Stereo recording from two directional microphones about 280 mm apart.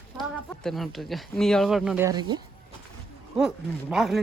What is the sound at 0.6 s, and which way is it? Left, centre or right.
Speech, centre.